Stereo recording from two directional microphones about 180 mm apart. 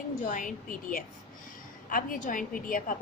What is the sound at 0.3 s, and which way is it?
Speech, 45° left (ahead or behind).